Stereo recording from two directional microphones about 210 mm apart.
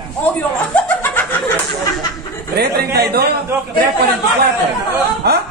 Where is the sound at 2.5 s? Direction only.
50° right (ahead or behind).